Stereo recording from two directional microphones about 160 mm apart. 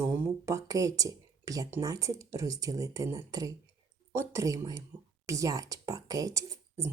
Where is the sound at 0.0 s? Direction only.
15° right (ahead or behind).